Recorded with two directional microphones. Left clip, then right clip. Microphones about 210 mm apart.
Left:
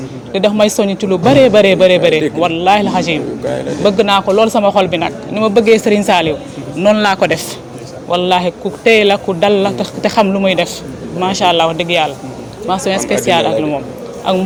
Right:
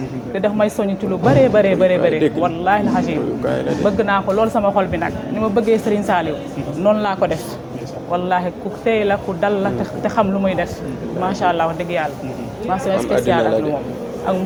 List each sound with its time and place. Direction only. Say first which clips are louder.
0.3 s speech: left 6 dB; 60° left (ahead or behind)
3.1 s a man's voice: left 3 dB; 20° left (ahead or behind)
3.8 s speech: left 7 dB; 60° left (ahead or behind)